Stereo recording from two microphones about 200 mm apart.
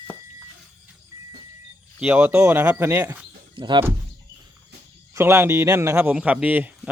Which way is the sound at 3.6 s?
25° right (ahead or behind).